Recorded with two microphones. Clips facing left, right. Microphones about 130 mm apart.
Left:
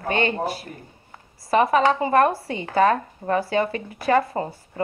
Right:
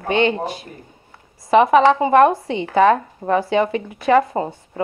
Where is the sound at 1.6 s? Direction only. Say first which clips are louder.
Right 4 dB; 20° right (ahead or behind).